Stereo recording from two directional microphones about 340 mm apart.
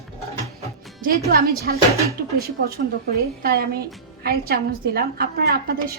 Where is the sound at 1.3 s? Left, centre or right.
Right.